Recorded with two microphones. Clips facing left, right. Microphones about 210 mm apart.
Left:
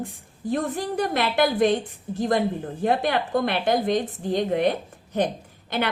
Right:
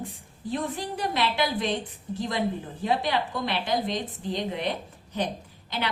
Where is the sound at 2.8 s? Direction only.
55° left (ahead or behind).